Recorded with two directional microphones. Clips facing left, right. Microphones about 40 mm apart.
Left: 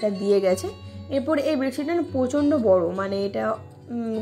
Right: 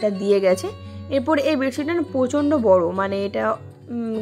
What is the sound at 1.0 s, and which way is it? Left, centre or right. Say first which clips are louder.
Speech: right 3 dB; right.